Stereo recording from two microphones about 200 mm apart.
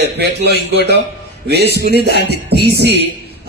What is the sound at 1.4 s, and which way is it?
A man's voice, 55° right (ahead or behind).